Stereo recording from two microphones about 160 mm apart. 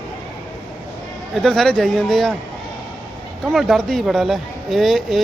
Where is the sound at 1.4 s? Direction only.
Centre (ahead or behind).